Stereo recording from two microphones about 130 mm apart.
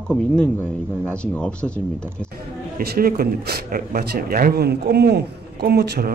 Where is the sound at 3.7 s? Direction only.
90° right.